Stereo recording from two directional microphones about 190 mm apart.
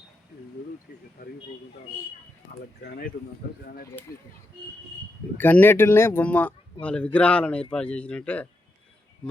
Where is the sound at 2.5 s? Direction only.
45° left (ahead or behind).